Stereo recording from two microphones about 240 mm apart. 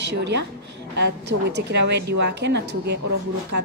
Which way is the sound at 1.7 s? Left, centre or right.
Right.